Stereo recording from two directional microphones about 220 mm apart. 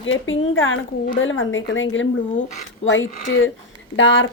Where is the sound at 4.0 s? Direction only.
55° left (ahead or behind).